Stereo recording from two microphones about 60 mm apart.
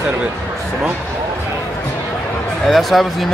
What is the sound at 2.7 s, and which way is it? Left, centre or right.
Speech, centre.